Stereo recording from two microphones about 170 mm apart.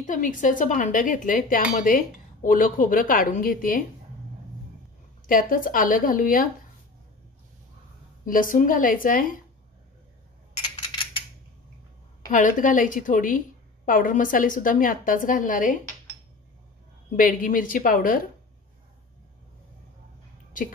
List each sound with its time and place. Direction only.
0.0 s a woman's voice: 50° left (ahead or behind)
5.2 s a woman's voice: 55° left (ahead or behind)
8.3 s a woman's voice: 55° left (ahead or behind)
12.3 s a woman's voice: 50° left (ahead or behind)
17.1 s a woman's voice: 50° left (ahead or behind)